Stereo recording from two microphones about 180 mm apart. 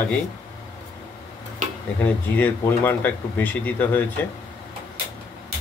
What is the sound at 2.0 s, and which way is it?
Speech, 10° left (ahead or behind).